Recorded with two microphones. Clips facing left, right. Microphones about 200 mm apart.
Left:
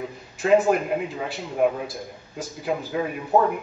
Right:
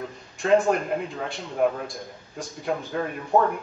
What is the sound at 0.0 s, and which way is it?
A man's voice, 5° left (ahead or behind).